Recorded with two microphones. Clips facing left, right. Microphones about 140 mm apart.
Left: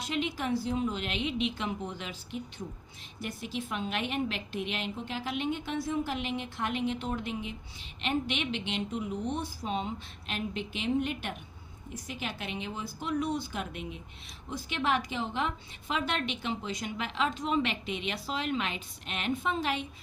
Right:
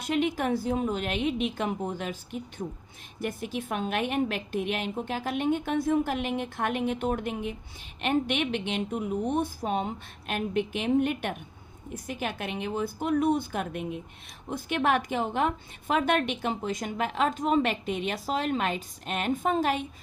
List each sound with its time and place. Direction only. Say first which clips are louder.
0.0 s a woman's voice: right 6 dB; 50° right (ahead or behind)